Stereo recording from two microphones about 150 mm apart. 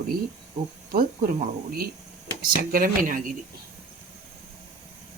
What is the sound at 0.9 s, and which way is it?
Speech, 85° right.